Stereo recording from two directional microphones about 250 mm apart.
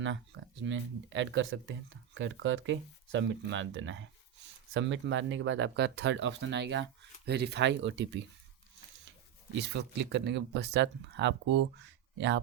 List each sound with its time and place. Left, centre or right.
0.0 s speech: right
9.6 s speech: right